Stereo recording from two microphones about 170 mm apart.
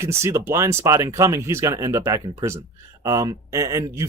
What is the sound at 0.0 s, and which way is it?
Speech, 15° right (ahead or behind).